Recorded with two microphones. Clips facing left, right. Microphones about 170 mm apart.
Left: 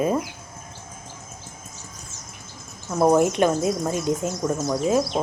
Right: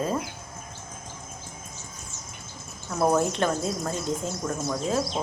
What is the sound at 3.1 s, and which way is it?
Speech, 15° left (ahead or behind).